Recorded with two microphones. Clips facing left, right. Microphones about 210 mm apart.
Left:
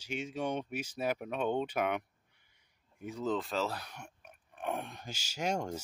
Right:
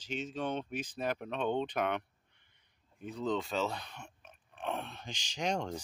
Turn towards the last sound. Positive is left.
turn(degrees=10)  # may be behind; listen again after turning